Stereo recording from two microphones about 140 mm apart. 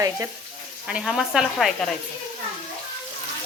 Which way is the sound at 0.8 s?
5° right (ahead or behind).